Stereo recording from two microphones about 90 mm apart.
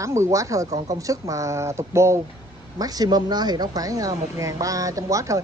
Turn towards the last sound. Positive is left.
turn(degrees=-35)  # may be behind; listen again after turning